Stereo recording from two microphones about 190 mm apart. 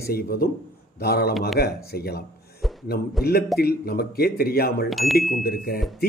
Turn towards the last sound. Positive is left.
turn(degrees=50)  # may be behind; listen again after turning